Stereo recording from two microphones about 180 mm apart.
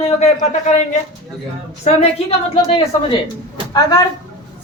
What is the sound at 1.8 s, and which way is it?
Speech, 35° left (ahead or behind).